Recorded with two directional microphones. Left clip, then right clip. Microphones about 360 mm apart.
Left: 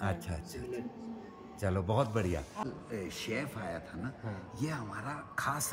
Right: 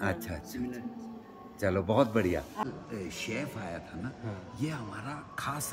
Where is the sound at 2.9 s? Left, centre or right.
Centre.